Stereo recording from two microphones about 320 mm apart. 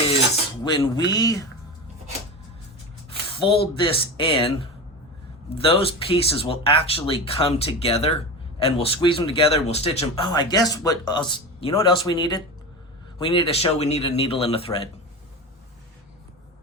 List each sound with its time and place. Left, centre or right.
0.6 s speech: centre
3.4 s speech: centre
5.5 s speech: centre